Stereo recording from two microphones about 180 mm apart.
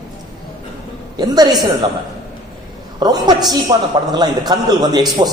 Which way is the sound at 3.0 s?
20° right (ahead or behind).